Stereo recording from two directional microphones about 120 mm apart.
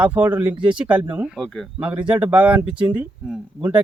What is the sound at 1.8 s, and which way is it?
Speech, 10° right (ahead or behind).